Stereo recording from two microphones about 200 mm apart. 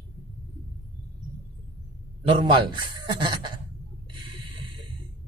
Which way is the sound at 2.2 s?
25° right (ahead or behind).